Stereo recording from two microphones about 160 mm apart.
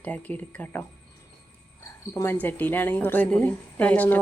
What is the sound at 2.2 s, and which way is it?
A woman's voice, 10° left (ahead or behind).